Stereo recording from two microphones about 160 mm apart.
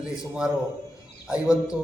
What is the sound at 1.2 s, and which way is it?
Speech, 5° right (ahead or behind).